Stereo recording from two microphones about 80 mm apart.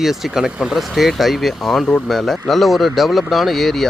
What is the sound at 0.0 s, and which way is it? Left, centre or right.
Speech, centre.